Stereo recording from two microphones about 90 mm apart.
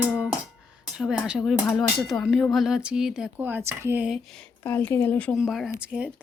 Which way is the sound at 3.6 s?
30° right (ahead or behind).